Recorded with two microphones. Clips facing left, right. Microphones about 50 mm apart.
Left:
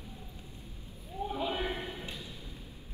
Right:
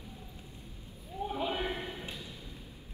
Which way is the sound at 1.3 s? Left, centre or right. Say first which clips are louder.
Even; right.